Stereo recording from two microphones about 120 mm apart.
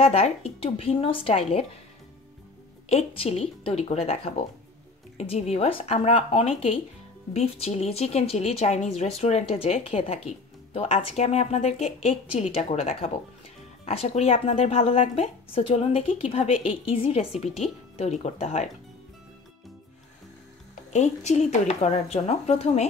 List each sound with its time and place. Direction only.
0.0 s a woman's voice: 60° left (ahead or behind)
2.9 s a woman's voice: 60° left (ahead or behind)
20.9 s speech: 75° left (ahead or behind)